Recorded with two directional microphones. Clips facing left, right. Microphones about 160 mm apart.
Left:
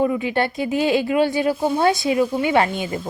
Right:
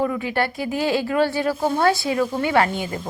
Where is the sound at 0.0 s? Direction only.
20° left (ahead or behind).